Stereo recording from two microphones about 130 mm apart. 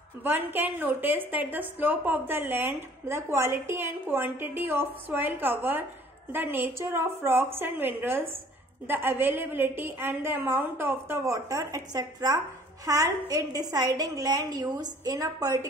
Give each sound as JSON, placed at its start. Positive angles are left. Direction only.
{"t": 0.2, "sound": "a woman's voice", "side_deg": -15}